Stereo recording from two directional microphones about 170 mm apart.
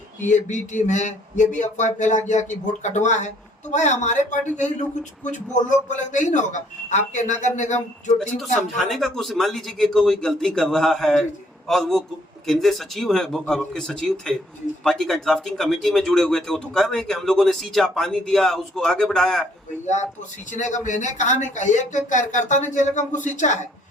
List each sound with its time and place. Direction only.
0.3 s speech: 45° left (ahead or behind)
8.7 s speech: centre (ahead or behind)
20.5 s speech: 45° left (ahead or behind)